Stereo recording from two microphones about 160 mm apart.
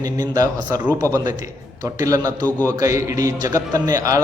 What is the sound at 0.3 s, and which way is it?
Speech, 20° right (ahead or behind).